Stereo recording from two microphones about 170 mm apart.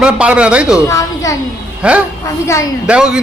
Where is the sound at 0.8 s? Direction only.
20° left (ahead or behind).